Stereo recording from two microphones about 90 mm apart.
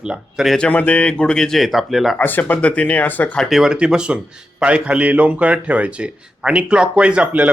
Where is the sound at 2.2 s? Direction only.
20° left (ahead or behind).